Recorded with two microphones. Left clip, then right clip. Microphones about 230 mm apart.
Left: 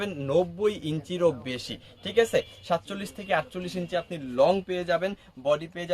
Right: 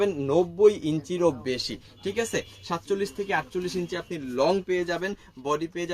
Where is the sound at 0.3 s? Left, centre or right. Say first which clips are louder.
Right 5 dB; centre.